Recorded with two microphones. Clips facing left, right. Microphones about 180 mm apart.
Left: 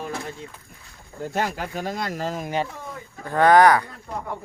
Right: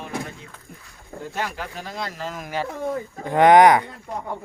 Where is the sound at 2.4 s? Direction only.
20° left (ahead or behind).